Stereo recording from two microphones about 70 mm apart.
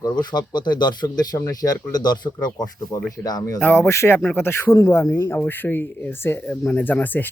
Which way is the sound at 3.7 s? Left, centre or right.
Left.